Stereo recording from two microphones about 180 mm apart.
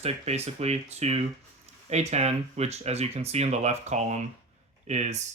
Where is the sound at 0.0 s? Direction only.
35° right (ahead or behind).